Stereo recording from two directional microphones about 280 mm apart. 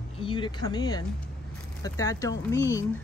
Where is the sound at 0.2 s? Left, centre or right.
Centre.